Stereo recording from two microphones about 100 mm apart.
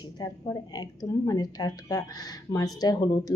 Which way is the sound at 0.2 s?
40° left (ahead or behind).